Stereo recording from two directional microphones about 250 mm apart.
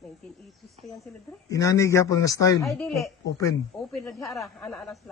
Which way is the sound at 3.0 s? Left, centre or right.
Centre.